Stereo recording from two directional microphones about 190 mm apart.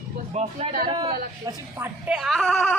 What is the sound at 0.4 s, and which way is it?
Speech, 35° right (ahead or behind).